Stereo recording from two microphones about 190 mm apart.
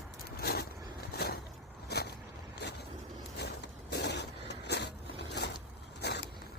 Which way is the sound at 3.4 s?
60° left (ahead or behind).